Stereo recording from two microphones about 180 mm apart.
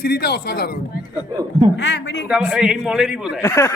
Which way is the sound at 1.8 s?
75° left (ahead or behind).